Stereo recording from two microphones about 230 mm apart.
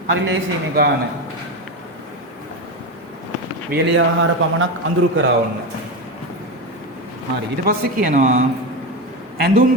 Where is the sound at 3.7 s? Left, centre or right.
Right.